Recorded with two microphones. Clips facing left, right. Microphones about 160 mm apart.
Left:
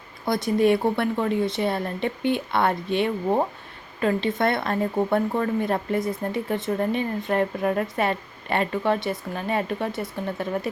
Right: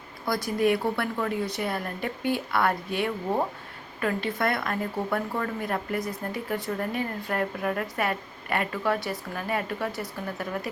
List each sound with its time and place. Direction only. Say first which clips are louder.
0.3 s a woman's voice: left 4 dB; 20° left (ahead or behind)